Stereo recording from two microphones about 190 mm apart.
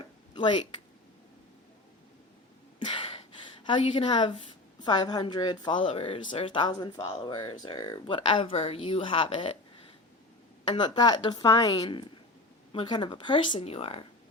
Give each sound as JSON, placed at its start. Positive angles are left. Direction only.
{"t": 0.0, "sound": "a sound", "side_deg": 25}
{"t": 2.8, "sound": "gasp", "side_deg": 30}
{"t": 3.7, "sound": "speech", "side_deg": 25}